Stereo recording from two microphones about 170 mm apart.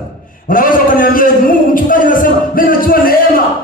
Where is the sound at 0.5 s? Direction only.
55° left (ahead or behind).